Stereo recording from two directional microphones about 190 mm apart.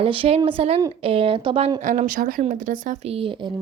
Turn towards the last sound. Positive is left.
turn(degrees=-25)  # may be behind; listen again after turning